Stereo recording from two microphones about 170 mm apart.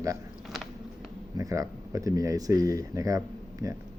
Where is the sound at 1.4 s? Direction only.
20° right (ahead or behind).